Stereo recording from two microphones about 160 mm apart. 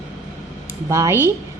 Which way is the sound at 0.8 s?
20° right (ahead or behind).